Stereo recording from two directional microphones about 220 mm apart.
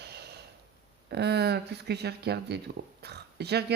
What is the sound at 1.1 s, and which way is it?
Speech, 50° right (ahead or behind).